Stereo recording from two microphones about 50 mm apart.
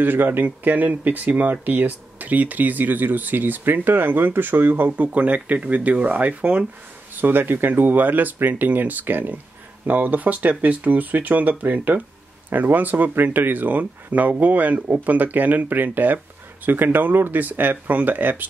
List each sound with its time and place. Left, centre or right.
0.0 s speech: right
7.2 s speech: right